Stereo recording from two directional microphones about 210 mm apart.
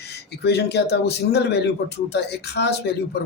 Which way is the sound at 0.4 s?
50° left (ahead or behind).